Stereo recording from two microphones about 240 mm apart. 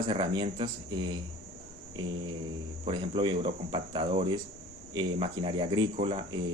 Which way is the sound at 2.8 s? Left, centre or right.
Right.